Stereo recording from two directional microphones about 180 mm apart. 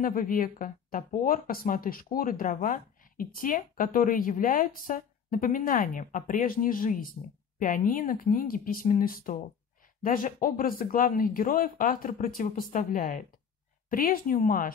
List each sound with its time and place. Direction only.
0.0 s speech: 50° left (ahead or behind)